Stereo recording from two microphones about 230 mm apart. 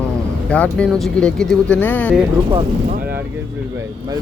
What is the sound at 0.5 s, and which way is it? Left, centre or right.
Speech, centre.